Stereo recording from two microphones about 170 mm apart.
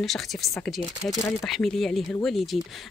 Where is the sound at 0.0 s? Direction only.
Centre (ahead or behind).